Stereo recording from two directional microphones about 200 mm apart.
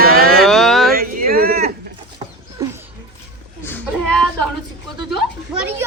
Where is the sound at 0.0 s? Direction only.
50° right (ahead or behind).